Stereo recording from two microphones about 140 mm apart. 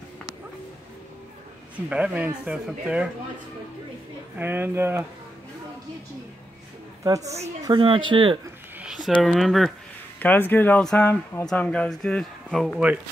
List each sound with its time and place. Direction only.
1.9 s speech: 10° right (ahead or behind)
4.4 s speech: 15° right (ahead or behind)
7.0 s a woman's voice: 25° right (ahead or behind)
7.6 s speech: 35° right (ahead or behind)
8.8 s a sound: 5° right (ahead or behind)
9.2 s speech: centre (ahead or behind)
10.1 s speech: 15° left (ahead or behind); by 13.0 s 5° right (ahead or behind)